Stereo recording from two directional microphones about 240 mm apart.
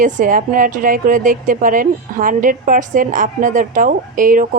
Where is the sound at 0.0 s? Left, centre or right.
Right.